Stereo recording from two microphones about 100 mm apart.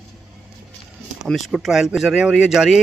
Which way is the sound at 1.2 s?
Centre (ahead or behind).